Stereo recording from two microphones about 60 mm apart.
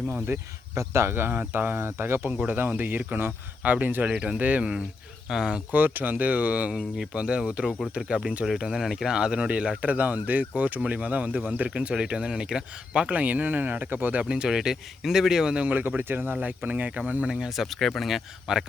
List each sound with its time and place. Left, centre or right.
0.1 s speech: right
2.5 s speech: right; by 5.6 s centre
5.7 s speech: right
8.4 s speech: centre
13.1 s speech: right
14.2 s speech: centre
15.6 s speech: right
17.5 s speech: centre
18.5 s speech: centre